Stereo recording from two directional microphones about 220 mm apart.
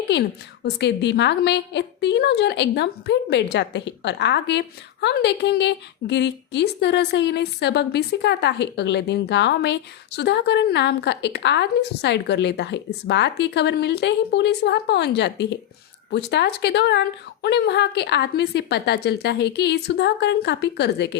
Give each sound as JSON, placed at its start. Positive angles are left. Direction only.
{"t": 0.1, "sound": "a woman's voice", "side_deg": 50}